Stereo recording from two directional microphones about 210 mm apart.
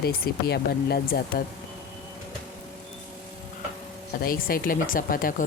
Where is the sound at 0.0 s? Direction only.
50° left (ahead or behind).